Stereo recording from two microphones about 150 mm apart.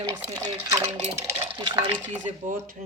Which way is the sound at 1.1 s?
20° right (ahead or behind).